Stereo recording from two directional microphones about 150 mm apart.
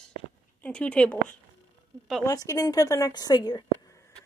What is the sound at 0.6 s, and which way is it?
Speech, 5° left (ahead or behind).